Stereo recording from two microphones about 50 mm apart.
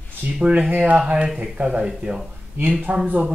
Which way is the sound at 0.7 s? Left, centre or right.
Right.